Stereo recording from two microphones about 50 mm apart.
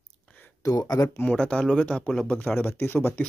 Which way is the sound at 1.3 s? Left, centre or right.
Centre.